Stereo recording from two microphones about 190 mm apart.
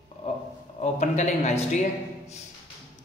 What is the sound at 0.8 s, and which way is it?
A man's voice, 35° left (ahead or behind).